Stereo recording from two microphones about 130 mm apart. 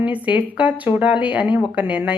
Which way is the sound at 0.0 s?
10° right (ahead or behind).